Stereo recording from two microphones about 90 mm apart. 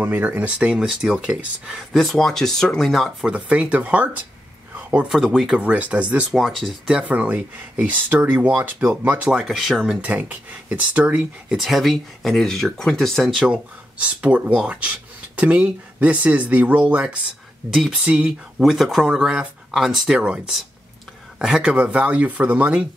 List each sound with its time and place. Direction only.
0.0 s speech: 20° right (ahead or behind); by 3.3 s centre (ahead or behind)
3.3 s speech: 15° right (ahead or behind)
4.7 s a sound: 15° right (ahead or behind)
5.1 s speech: centre (ahead or behind)
5.6 s speech: 15° right (ahead or behind)
6.3 s speech: centre (ahead or behind)
6.9 s speech: 15° right (ahead or behind)
10.0 s speech: 15° right (ahead or behind)
11.5 s speech: centre (ahead or behind)
13.5 s speech: 15° right (ahead or behind)
17.6 s speech: 5° right (ahead or behind)